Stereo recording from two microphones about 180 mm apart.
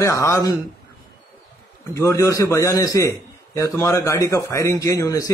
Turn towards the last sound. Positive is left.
turn(degrees=15)  # may be behind; listen again after turning